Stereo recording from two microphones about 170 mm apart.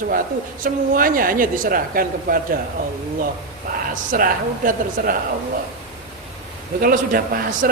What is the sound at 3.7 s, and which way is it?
A man's voice, 55° right (ahead or behind).